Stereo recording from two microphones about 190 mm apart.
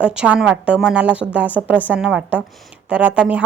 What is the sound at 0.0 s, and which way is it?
A woman's voice, 5° right (ahead or behind).